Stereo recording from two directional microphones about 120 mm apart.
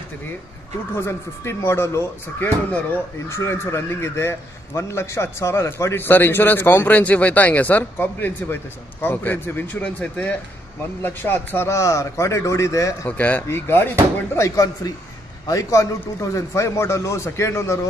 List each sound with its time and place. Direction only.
0.9 s a man's voice: 20° left (ahead or behind)